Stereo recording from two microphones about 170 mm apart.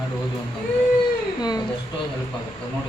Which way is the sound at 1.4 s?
25° left (ahead or behind).